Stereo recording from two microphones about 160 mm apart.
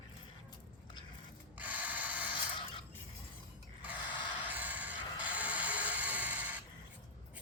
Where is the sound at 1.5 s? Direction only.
10° right (ahead or behind).